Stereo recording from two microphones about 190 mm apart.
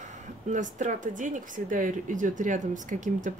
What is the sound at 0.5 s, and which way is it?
Speech, 40° right (ahead or behind).